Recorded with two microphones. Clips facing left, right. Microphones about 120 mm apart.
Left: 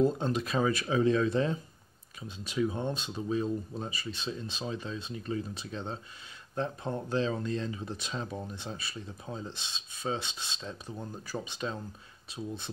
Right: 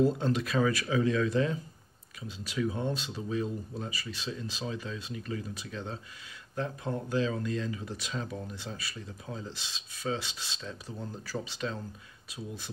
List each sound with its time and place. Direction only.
0.0 s speech: 20° left (ahead or behind)